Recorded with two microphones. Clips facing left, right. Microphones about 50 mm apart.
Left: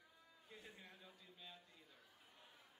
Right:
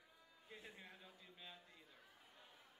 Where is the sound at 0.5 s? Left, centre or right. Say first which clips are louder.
Right 2 dB; centre.